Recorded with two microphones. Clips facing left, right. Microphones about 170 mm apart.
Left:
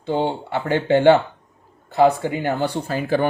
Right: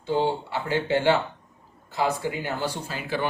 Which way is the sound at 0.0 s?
60° left (ahead or behind).